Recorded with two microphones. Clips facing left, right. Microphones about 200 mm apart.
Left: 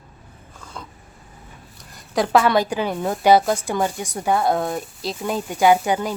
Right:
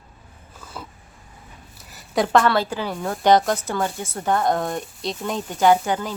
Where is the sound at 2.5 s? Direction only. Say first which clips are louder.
Left 3 dB; 15° left (ahead or behind).